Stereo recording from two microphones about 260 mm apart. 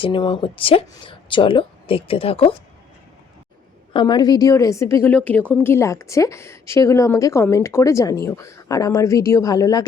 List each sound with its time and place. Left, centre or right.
0.0 s speech: centre
3.9 s a woman's voice: centre